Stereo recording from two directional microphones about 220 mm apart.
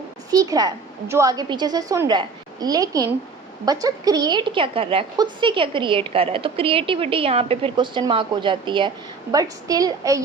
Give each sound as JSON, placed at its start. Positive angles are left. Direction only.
{"t": 0.3, "sound": "a woman's voice", "side_deg": -15}